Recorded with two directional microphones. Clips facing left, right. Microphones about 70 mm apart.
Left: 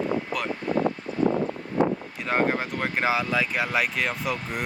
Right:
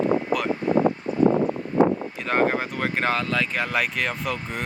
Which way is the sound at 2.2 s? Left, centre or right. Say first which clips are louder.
Right 2 dB; centre.